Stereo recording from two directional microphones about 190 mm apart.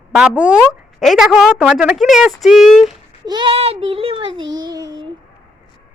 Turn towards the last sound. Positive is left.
turn(degrees=-20)  # may be behind; listen again after turning